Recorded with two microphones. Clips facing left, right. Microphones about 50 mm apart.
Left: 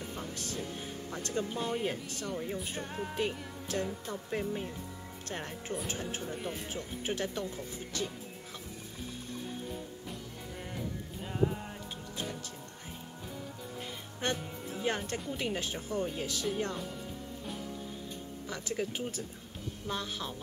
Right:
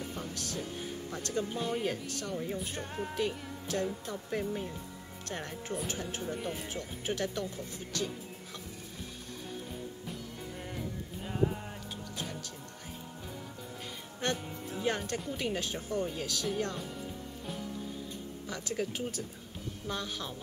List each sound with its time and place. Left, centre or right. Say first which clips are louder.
0.0 s music: right 1 dB; centre
0.3 s speech: even; left
0.6 s speech: right 2 dB; centre
1.1 s speech: even; centre
1.5 s speech: even; centre
3.2 s music: even; left
4.3 s speech: right 1 dB; centre
6.2 s speech: right 1 dB; centre
6.7 s speech: even; centre
10.0 s music: right 1 dB; centre
14.2 s speech: even; centre
18.5 s speech: even; centre